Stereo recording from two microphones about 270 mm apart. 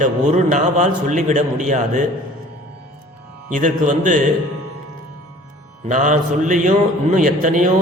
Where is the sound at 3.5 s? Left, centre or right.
Right.